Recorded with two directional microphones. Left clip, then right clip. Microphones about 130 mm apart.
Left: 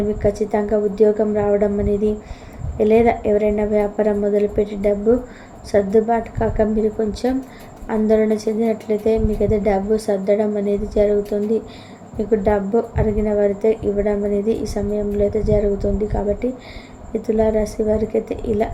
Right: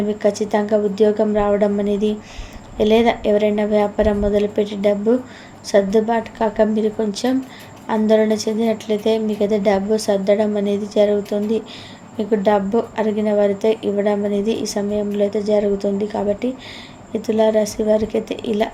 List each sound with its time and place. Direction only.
0.2 s a woman's voice: 30° right (ahead or behind)